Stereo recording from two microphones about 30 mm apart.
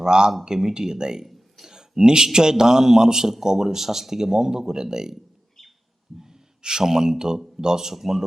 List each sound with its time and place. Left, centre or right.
0.0 s a man's voice: right
6.1 s speech: centre
7.9 s speech: centre